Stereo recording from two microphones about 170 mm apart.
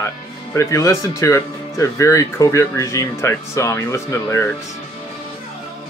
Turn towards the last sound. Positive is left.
turn(degrees=15)  # may be behind; listen again after turning